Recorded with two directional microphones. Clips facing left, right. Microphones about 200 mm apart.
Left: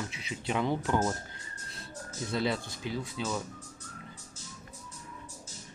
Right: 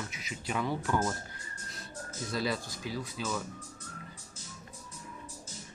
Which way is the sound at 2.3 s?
25° left (ahead or behind).